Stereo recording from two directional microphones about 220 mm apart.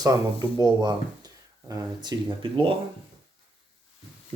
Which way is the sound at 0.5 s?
20° right (ahead or behind).